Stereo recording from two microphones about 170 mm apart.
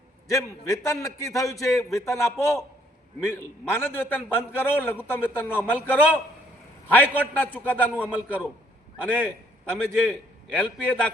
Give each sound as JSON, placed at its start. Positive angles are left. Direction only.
{"t": 0.3, "sound": "a man's voice", "side_deg": 20}
{"t": 7.9, "sound": "a man's voice", "side_deg": -10}
{"t": 9.2, "sound": "a man's voice", "side_deg": 5}